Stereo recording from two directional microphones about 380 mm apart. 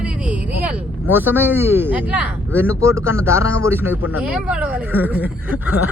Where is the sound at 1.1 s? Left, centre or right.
Centre.